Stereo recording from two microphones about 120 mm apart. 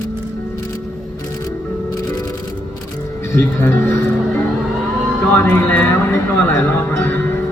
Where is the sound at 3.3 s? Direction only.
20° left (ahead or behind).